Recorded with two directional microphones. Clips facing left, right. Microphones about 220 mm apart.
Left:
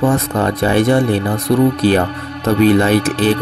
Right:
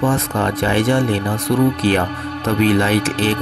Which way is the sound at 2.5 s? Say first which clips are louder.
Left 4 dB; 40° left (ahead or behind).